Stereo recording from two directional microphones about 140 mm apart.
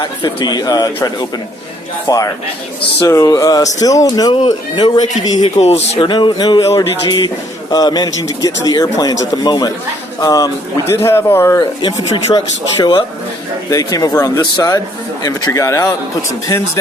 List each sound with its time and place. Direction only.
0.0 s speech: 35° left (ahead or behind)
2.0 s speech: 25° left (ahead or behind)
5.5 s speech: 50° left (ahead or behind)
6.0 s speech: 35° left (ahead or behind); by 11.6 s 20° left (ahead or behind)
11.6 s speech: 35° left (ahead or behind)